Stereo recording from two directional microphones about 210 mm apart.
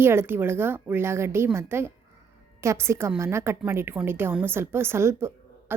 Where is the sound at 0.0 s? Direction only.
10° right (ahead or behind).